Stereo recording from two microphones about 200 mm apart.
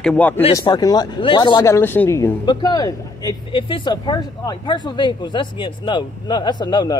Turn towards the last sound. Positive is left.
turn(degrees=20)  # may be behind; listen again after turning